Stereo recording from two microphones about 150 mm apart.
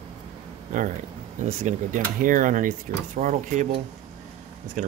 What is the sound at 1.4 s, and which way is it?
Speech, 50° right (ahead or behind).